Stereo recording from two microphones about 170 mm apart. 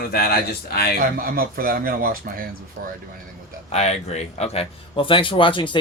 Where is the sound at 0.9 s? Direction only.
55° right (ahead or behind).